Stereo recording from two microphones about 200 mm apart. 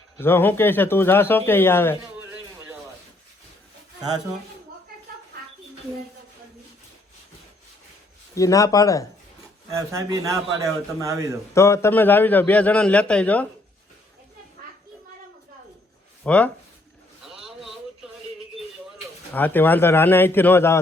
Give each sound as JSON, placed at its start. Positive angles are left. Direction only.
{"t": 0.2, "sound": "a man's voice", "side_deg": 10}
{"t": 8.4, "sound": "a man's voice", "side_deg": 15}
{"t": 9.9, "sound": "a man's voice", "side_deg": -15}
{"t": 11.5, "sound": "a man's voice", "side_deg": 15}
{"t": 16.2, "sound": "speech", "side_deg": 5}
{"t": 17.2, "sound": "a sound", "side_deg": 0}
{"t": 19.3, "sound": "a man's voice", "side_deg": 10}